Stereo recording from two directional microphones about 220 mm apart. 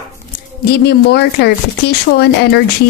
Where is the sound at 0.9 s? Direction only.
50° left (ahead or behind).